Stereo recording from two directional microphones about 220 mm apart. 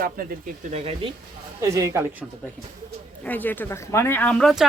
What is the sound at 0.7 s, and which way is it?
Speech, 25° right (ahead or behind).